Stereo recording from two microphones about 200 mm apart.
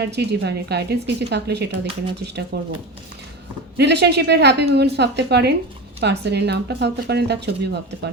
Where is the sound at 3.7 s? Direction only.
60° right (ahead or behind).